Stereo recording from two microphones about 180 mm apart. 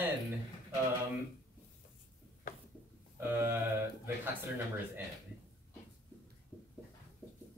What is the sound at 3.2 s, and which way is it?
Speech, 10° right (ahead or behind).